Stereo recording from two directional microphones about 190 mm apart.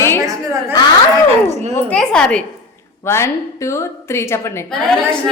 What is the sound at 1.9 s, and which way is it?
A woman's voice, 5° left (ahead or behind).